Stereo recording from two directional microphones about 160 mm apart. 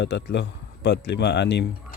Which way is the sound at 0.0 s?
90° left.